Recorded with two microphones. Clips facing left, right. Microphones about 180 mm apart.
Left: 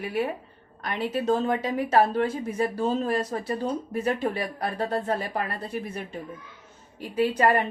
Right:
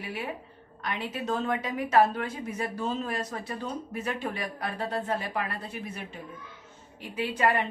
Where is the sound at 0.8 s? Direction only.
40° left (ahead or behind).